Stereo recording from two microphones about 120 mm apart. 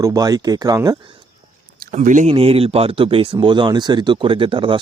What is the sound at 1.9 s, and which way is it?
Speech, 90° right.